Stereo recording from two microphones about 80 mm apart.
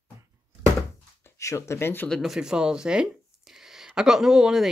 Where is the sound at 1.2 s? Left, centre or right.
Left.